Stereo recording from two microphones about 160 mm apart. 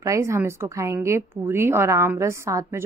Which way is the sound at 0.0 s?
20° right (ahead or behind).